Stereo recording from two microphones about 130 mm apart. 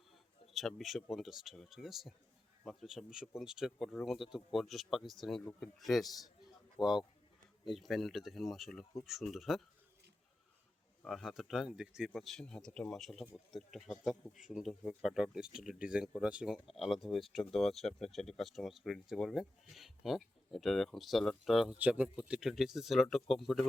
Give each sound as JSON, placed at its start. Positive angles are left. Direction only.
{"t": 0.5, "sound": "speech", "side_deg": 0}
{"t": 5.5, "sound": "speech", "side_deg": 15}
{"t": 5.8, "sound": "speech", "side_deg": 0}
{"t": 6.8, "sound": "speech", "side_deg": 35}
{"t": 7.7, "sound": "speech", "side_deg": 0}
{"t": 11.0, "sound": "speech", "side_deg": 0}
{"t": 21.8, "sound": "speech", "side_deg": -10}